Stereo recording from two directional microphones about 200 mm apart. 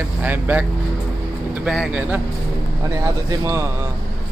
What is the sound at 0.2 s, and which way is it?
Speech, 10° right (ahead or behind).